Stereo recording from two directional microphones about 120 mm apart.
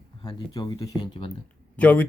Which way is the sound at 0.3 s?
30° left (ahead or behind).